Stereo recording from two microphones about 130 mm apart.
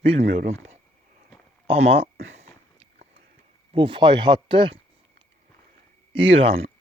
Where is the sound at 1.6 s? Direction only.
50° right (ahead or behind).